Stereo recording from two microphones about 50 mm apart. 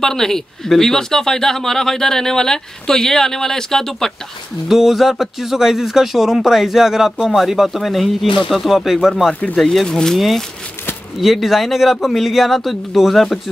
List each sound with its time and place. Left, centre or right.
0.0 s speech: centre
4.6 s speech: centre
9.3 s speech: left
9.6 s speech: centre
9.8 s speech: centre
10.1 s speech: centre